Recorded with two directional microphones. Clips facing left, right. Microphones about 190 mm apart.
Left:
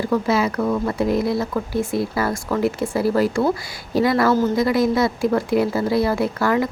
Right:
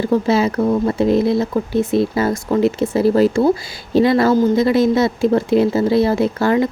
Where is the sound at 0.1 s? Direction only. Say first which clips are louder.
Right 4 dB; 25° right (ahead or behind).